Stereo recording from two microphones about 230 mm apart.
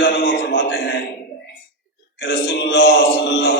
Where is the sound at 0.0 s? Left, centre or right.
Left.